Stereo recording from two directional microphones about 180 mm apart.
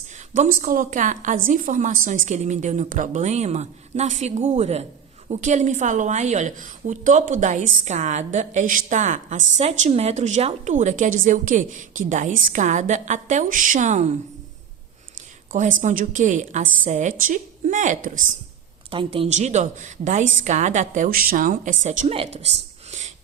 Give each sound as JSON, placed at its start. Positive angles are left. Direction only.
{"t": 0.3, "sound": "a woman's voice", "side_deg": -50}
{"t": 15.5, "sound": "a woman's voice", "side_deg": -45}
{"t": 18.9, "sound": "a woman's voice", "side_deg": -30}